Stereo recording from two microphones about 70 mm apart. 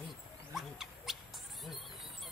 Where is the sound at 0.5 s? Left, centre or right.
Centre.